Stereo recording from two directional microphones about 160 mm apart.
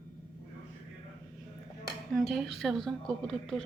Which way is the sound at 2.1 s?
Centre (ahead or behind).